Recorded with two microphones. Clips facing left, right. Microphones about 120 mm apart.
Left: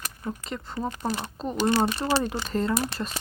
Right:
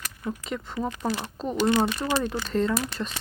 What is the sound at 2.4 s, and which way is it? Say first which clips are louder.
Speech: right 1 dB; 5° left (ahead or behind).